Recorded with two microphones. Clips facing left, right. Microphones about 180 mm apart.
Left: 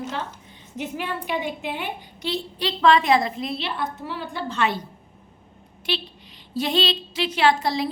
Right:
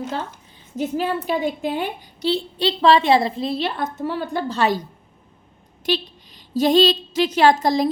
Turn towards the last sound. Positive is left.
turn(degrees=-40)  # may be behind; listen again after turning